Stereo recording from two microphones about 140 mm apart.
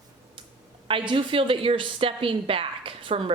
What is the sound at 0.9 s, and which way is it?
A woman's voice, 40° right (ahead or behind).